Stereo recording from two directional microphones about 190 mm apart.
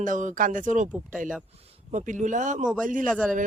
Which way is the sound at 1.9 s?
40° right (ahead or behind).